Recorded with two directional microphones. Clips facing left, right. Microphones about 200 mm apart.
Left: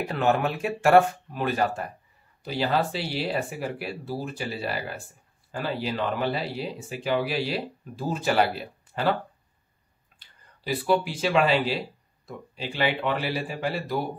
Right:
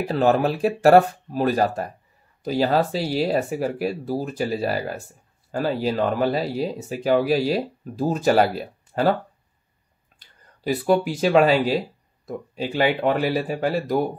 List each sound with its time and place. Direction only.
0.1 s speech: 35° right (ahead or behind)
10.6 s speech: 45° right (ahead or behind)